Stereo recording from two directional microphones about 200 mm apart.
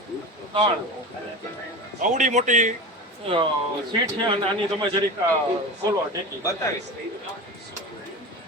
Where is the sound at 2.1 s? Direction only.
35° right (ahead or behind).